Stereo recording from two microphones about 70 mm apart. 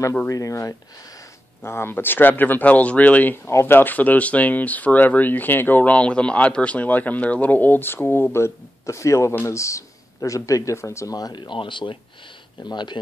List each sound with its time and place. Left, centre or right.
0.3 s speech: left
1.6 s speech: left
3.4 s speech: left
11.1 s speech: left
12.5 s speech: left